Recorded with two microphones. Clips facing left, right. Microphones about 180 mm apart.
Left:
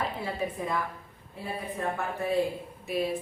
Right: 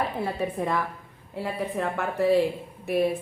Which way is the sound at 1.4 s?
90° right.